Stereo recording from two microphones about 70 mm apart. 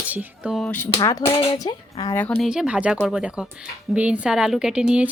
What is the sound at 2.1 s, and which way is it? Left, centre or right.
Speech, left.